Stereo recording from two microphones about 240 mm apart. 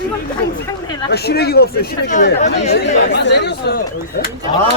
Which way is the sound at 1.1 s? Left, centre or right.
Left.